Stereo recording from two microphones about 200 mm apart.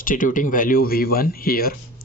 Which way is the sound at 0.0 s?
40° left (ahead or behind).